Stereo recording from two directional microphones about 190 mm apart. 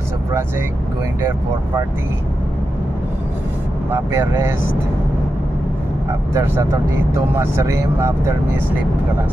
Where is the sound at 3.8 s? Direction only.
15° right (ahead or behind).